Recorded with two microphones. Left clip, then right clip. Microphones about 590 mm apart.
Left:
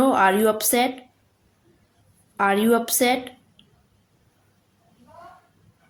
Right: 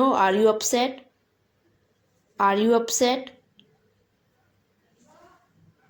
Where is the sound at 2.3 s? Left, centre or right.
Left.